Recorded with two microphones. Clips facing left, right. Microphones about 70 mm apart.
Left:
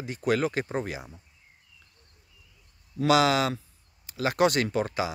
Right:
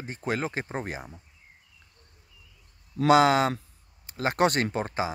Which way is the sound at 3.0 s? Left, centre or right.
Right.